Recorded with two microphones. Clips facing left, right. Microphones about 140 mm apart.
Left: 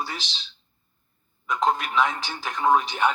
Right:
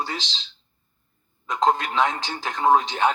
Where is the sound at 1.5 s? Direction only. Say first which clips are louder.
Right 2 dB; 20° right (ahead or behind).